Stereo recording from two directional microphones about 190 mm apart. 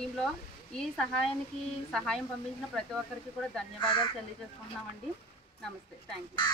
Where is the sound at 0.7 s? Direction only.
5° left (ahead or behind).